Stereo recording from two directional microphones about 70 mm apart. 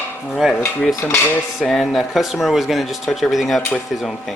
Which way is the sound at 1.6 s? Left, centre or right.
Centre.